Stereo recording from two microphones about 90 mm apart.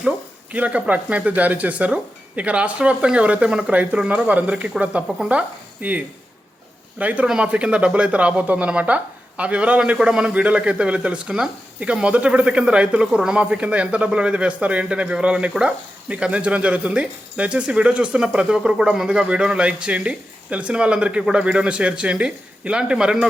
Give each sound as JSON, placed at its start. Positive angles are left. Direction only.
{"t": 0.5, "sound": "a man's voice", "side_deg": -15}